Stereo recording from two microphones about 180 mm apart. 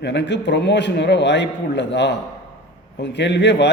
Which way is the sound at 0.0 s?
75° left (ahead or behind).